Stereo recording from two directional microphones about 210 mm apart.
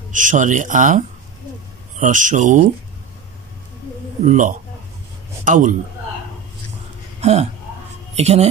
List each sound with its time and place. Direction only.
0.1 s speech: 40° right (ahead or behind)
4.3 s speech: 40° right (ahead or behind)
7.2 s speech: 30° right (ahead or behind)